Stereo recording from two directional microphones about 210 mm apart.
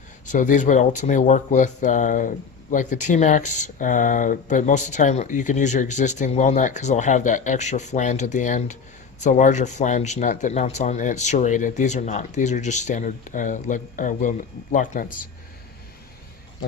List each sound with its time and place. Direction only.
0.3 s speech: 40° left (ahead or behind)